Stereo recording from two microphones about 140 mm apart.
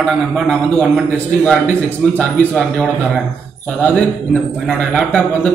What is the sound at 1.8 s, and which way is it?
Speech, 10° left (ahead or behind).